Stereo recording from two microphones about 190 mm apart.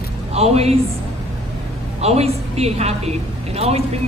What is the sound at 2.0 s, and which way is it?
A woman's voice, 35° right (ahead or behind).